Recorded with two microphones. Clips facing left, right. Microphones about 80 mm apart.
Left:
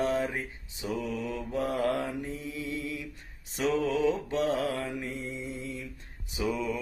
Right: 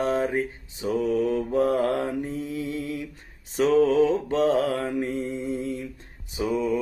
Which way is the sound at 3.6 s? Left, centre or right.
Right.